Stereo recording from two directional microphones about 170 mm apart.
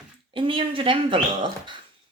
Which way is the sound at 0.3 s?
30° right (ahead or behind).